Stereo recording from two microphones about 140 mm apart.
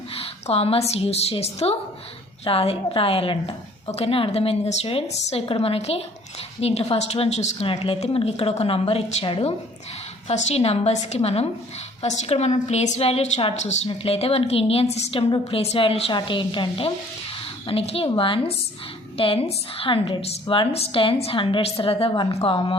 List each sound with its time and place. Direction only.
0.2 s a woman's voice: 45° left (ahead or behind)